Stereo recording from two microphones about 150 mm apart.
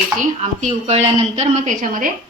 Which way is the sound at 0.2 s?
50° right (ahead or behind).